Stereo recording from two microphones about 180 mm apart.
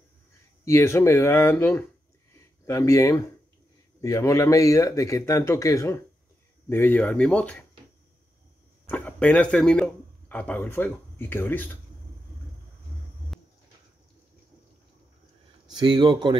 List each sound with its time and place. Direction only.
0.7 s speech: 15° left (ahead or behind)
8.8 s speech: 10° left (ahead or behind)
13.3 s a sound: centre (ahead or behind)
15.8 s speech: 25° right (ahead or behind)